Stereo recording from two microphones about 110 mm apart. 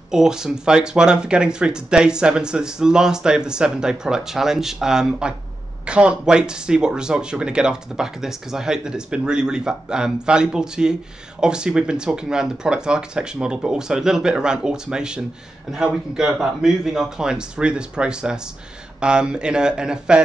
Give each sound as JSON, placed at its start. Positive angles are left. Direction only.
{"t": 0.1, "sound": "speech", "side_deg": -5}